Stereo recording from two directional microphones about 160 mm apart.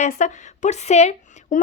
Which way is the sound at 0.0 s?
50° left (ahead or behind).